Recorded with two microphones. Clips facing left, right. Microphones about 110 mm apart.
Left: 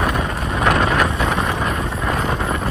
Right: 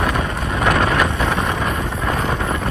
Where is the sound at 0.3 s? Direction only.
Centre (ahead or behind).